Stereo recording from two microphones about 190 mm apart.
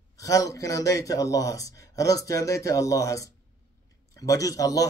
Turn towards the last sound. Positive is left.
turn(degrees=20)  # may be behind; listen again after turning